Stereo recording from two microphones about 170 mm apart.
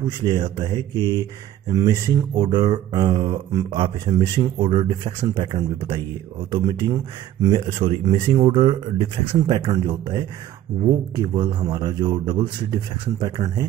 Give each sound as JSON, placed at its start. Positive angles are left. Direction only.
{"t": 0.0, "sound": "speech", "side_deg": -25}
{"t": 8.0, "sound": "speech", "side_deg": -25}